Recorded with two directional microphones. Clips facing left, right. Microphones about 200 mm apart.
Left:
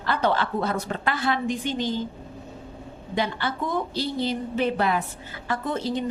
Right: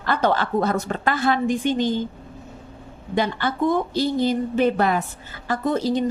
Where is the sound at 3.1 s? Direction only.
50° right (ahead or behind).